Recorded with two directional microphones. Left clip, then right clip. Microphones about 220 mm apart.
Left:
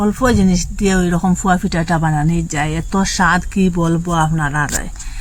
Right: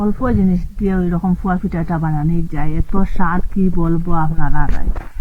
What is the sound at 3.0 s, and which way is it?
Speech, 60° left (ahead or behind).